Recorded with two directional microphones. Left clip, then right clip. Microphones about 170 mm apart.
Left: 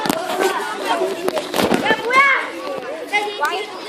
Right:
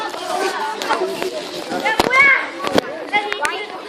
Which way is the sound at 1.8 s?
55° left (ahead or behind).